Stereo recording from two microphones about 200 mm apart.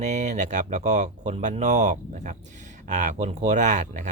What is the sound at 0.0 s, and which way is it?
Speech, 35° right (ahead or behind).